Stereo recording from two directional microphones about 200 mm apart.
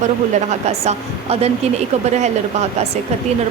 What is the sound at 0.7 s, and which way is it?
A woman's voice, 30° right (ahead or behind).